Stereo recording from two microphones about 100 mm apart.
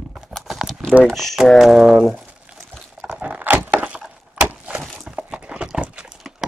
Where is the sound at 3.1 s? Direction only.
15° right (ahead or behind).